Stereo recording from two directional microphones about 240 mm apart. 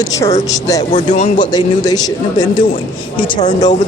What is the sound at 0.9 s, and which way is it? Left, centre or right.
Speech, left.